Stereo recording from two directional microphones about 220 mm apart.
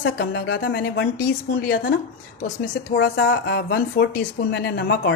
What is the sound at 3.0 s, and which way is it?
Speech, 45° left (ahead or behind).